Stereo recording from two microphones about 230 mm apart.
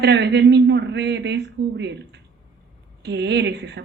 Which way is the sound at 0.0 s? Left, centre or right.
Right.